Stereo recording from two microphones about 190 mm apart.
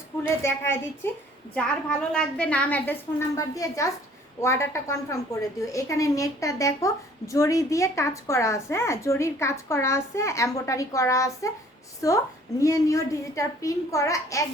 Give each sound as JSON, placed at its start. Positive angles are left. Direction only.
{"t": 0.4, "sound": "a woman's voice", "side_deg": 15}